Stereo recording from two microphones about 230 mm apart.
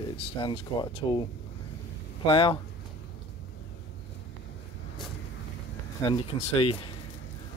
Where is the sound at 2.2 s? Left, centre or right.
Left.